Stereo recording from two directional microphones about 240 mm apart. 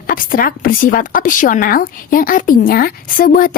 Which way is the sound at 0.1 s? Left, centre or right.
Left.